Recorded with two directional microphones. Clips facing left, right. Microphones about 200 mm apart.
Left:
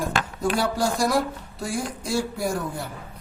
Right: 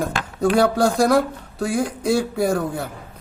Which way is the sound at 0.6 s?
60° right (ahead or behind).